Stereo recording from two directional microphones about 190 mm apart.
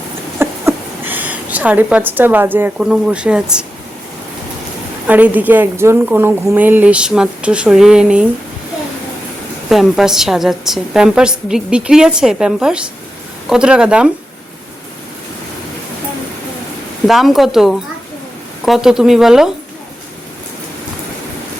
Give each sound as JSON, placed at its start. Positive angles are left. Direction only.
{"t": 0.3, "sound": "speech", "side_deg": -10}
{"t": 5.0, "sound": "a woman's voice", "side_deg": -10}
{"t": 9.6, "sound": "a woman's voice", "side_deg": 0}
{"t": 17.1, "sound": "a woman's voice", "side_deg": 0}